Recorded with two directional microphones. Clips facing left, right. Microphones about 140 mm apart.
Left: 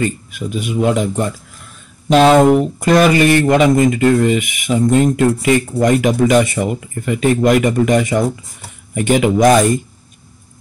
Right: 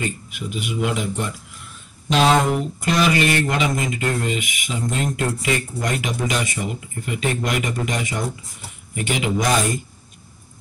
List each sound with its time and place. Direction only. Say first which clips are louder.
0.0 s speech: left 8 dB; 45° left (ahead or behind)